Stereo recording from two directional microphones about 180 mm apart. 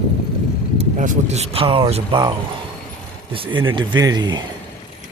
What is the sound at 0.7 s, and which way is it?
Speech, 45° right (ahead or behind).